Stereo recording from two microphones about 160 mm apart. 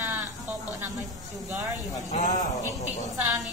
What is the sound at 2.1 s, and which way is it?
Speech, 55° left (ahead or behind).